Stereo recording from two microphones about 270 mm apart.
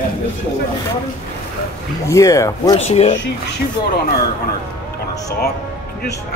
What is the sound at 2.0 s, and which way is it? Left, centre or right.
Speech, centre.